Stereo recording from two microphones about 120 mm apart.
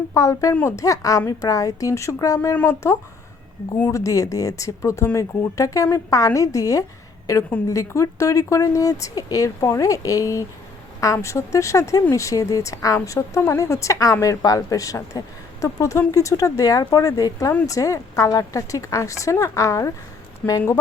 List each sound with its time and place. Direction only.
0.1 s speech: 25° left (ahead or behind)